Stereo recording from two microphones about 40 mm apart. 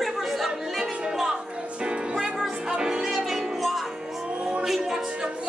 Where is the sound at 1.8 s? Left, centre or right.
Right.